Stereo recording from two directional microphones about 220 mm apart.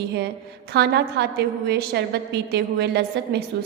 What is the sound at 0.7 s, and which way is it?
A woman's voice, 50° right (ahead or behind).